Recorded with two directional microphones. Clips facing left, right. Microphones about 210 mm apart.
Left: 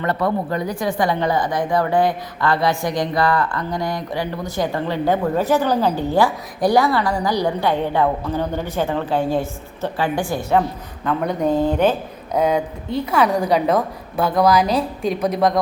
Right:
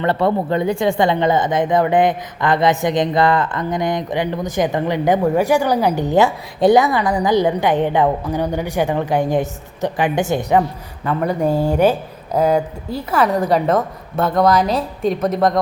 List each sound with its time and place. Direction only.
0.0 s speech: 25° right (ahead or behind)
11.0 s speech: 5° right (ahead or behind)